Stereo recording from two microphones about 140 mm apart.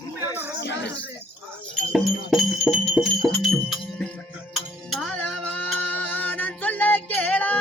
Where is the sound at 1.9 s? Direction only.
Centre (ahead or behind).